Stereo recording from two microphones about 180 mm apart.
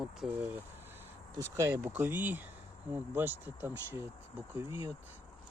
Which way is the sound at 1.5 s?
15° right (ahead or behind).